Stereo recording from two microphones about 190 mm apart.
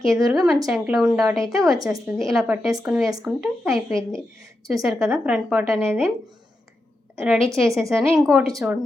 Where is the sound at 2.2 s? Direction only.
Centre (ahead or behind).